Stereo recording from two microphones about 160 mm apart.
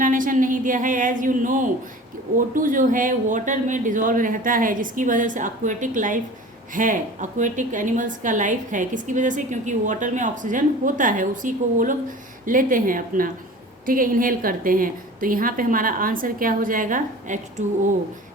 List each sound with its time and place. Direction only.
0.0 s a woman's voice: 55° right (ahead or behind)